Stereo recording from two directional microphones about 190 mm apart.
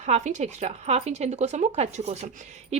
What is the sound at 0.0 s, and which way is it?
Speech, 40° right (ahead or behind).